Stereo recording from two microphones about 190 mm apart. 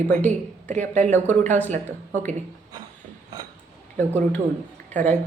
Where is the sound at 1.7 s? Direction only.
40° right (ahead or behind).